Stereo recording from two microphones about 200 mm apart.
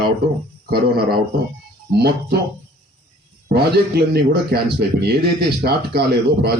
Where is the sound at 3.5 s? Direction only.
55° right (ahead or behind).